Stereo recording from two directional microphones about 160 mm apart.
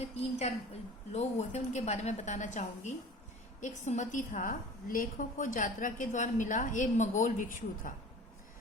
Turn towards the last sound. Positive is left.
turn(degrees=55)  # may be behind; listen again after turning